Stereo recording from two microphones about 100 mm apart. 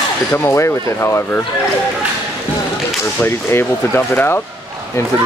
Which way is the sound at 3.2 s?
25° left (ahead or behind).